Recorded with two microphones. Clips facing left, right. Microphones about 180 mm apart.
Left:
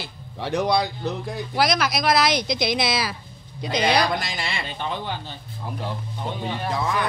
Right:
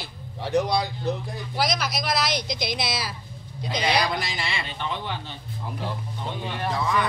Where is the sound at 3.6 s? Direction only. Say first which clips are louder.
Left 3 dB; 55° left (ahead or behind).